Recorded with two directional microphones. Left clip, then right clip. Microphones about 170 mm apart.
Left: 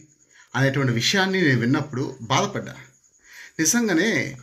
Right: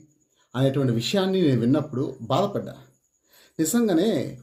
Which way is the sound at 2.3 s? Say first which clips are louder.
Left 1 dB; 20° left (ahead or behind).